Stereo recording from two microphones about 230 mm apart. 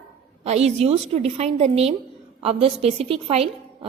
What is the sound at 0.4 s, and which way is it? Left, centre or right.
A woman's voice, right.